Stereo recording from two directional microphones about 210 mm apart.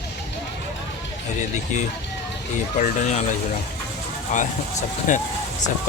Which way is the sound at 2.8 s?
35° left (ahead or behind).